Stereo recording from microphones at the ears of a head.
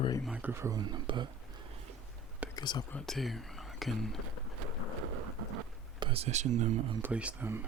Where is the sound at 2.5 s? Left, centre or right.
Left.